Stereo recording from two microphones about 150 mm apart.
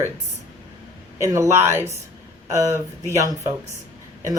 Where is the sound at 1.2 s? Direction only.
20° right (ahead or behind).